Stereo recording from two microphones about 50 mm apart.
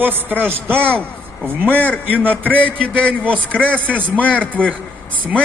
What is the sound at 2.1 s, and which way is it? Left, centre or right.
Speech, right.